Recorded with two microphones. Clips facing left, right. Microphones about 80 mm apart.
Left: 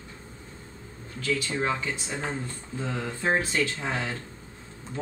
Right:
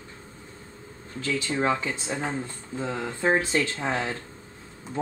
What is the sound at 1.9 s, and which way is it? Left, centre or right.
Speech, centre.